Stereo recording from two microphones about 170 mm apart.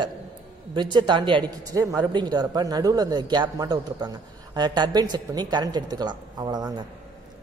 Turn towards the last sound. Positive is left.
turn(degrees=-25)  # may be behind; listen again after turning